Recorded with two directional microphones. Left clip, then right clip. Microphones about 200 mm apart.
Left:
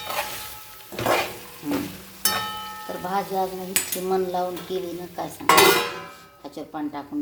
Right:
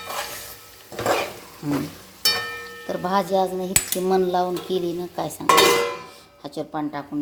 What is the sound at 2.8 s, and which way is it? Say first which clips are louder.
Dishes: right 5 dB; 35° right (ahead or behind).